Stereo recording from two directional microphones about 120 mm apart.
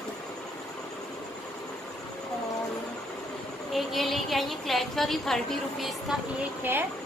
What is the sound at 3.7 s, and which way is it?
A woman's voice, centre (ahead or behind).